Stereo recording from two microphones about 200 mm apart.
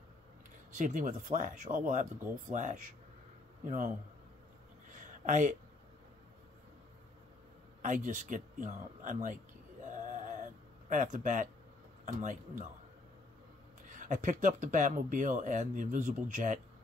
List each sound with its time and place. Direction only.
0.7 s speech: 40° right (ahead or behind)
4.8 s a sound: 40° right (ahead or behind)
7.8 s speech: 40° right (ahead or behind)
9.8 s a sound: 40° right (ahead or behind)
12.0 s speech: 40° right (ahead or behind)
13.8 s speech: 40° right (ahead or behind)